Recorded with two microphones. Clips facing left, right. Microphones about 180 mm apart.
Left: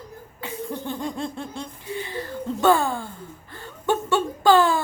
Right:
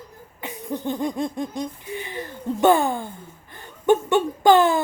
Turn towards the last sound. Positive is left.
turn(degrees=-20)  # may be behind; listen again after turning